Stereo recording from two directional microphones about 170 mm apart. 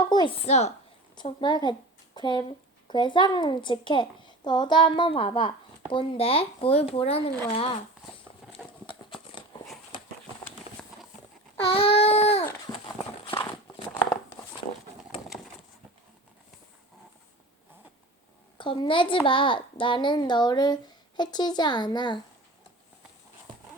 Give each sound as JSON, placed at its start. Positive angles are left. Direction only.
{"t": 0.0, "sound": "a woman's voice", "side_deg": 25}
{"t": 1.1, "sound": "a woman's voice", "side_deg": 25}
{"t": 9.0, "sound": "a sound", "side_deg": 30}
{"t": 11.6, "sound": "a sound", "side_deg": 35}
{"t": 13.2, "sound": "horse", "side_deg": 30}
{"t": 18.5, "sound": "a woman's voice", "side_deg": 30}